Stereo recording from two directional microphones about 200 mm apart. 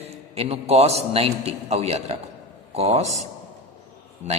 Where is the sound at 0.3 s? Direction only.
30° right (ahead or behind).